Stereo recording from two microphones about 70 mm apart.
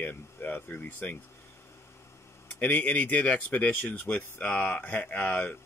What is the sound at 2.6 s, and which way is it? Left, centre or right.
Speech, left.